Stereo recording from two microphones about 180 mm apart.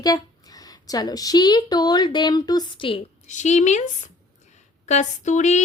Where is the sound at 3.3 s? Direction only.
40° left (ahead or behind).